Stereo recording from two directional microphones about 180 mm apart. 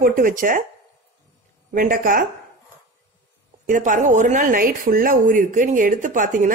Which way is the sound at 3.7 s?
45° right (ahead or behind).